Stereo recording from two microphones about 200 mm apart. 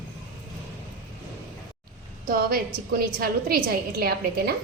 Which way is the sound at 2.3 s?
50° right (ahead or behind).